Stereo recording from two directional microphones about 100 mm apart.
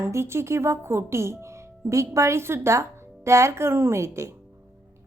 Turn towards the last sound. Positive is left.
turn(degrees=-30)  # may be behind; listen again after turning